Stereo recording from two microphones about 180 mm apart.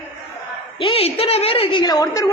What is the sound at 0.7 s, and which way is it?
A woman's voice, 30° left (ahead or behind).